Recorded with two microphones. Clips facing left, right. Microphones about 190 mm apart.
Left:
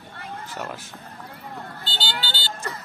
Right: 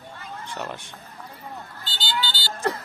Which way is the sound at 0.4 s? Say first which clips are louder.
Right 2 dB; 5° left (ahead or behind).